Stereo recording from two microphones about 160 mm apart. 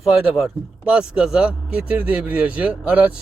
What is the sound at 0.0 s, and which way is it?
Speech, centre (ahead or behind).